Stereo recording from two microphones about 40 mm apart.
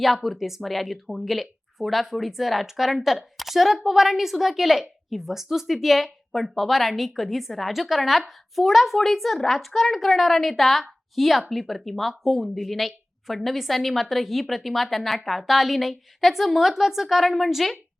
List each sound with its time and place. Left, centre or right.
0.0 s a woman's voice: centre